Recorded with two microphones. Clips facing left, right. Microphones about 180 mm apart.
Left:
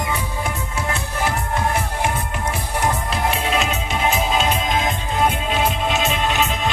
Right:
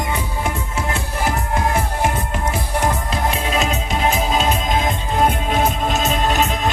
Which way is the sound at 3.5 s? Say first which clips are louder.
Right 1 dB; 40° right (ahead or behind).